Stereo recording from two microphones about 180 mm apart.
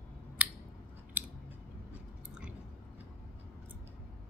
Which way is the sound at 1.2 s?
10° right (ahead or behind).